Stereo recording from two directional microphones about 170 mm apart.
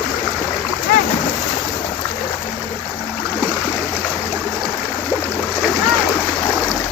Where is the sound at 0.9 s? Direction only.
60° left (ahead or behind).